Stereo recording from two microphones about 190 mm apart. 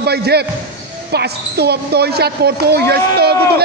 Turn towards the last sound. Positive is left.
turn(degrees=-55)  # may be behind; listen again after turning